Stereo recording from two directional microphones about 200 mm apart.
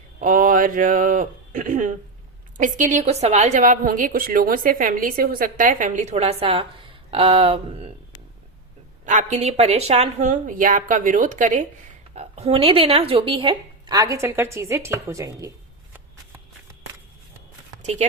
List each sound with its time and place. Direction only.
0.2 s a woman's voice: 45° right (ahead or behind)
9.0 s a woman's voice: 35° right (ahead or behind); by 15.4 s 15° right (ahead or behind)